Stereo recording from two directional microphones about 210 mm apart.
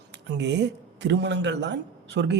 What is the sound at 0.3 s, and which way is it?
Speech, 55° right (ahead or behind).